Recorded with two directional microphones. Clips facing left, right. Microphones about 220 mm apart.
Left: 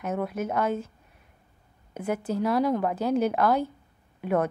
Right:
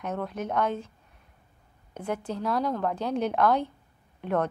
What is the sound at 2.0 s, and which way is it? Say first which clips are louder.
A woman's voice: left 4 dB; 5° left (ahead or behind).